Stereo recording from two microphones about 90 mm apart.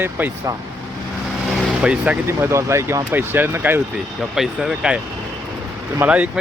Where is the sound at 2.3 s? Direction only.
30° right (ahead or behind).